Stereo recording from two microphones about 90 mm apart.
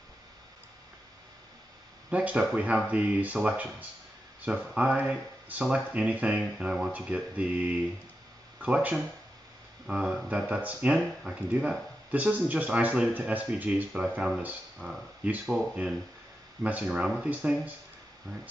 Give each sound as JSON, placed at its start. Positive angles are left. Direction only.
{"t": 2.0, "sound": "speech", "side_deg": -15}